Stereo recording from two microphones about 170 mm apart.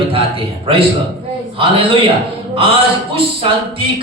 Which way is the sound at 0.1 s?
35° right (ahead or behind).